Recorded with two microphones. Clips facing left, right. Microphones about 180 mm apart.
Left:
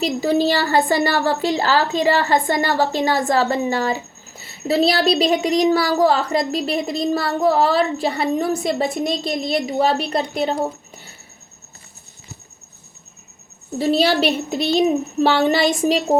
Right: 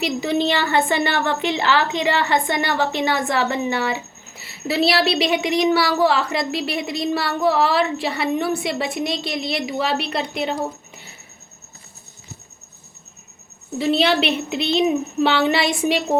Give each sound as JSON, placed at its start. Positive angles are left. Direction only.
{"t": 0.4, "sound": "a woman's voice", "side_deg": 40}
{"t": 13.7, "sound": "a woman's voice", "side_deg": 40}